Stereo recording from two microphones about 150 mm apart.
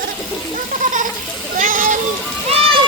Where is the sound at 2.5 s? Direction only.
40° right (ahead or behind).